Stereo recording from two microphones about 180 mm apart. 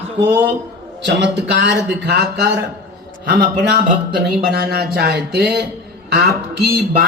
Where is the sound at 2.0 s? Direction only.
65° right (ahead or behind).